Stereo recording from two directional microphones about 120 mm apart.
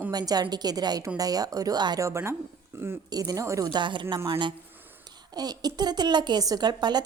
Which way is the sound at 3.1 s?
30° right (ahead or behind).